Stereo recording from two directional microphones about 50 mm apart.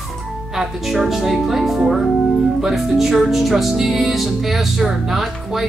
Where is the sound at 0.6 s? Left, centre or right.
Centre.